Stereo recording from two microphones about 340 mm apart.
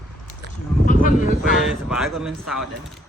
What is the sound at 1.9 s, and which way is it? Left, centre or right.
Speech, centre.